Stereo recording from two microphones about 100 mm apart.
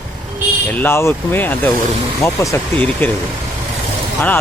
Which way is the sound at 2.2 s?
30° left (ahead or behind).